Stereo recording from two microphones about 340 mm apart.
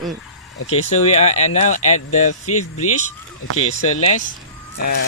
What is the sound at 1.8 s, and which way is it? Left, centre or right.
Speech, left.